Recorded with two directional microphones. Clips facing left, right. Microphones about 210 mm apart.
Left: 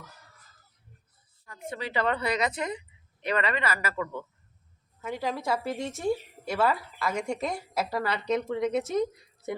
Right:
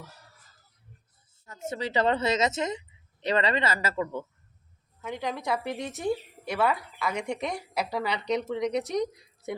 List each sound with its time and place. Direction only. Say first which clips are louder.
1.7 s speech: right 3 dB; 25° right (ahead or behind)
4.9 s a woman's voice: left 1 dB; 5° left (ahead or behind)